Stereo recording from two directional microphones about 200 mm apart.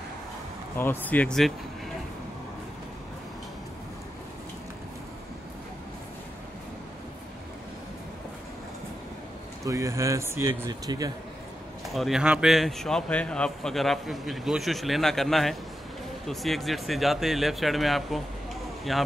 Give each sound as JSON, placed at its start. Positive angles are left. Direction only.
{"t": 0.7, "sound": "speech", "side_deg": 10}
{"t": 9.7, "sound": "speech", "side_deg": -15}
{"t": 11.9, "sound": "a man's voice", "side_deg": 0}